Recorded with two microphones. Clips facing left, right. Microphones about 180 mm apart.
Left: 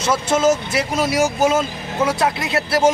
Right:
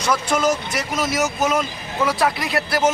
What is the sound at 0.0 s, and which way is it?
A man's voice, 25° left (ahead or behind).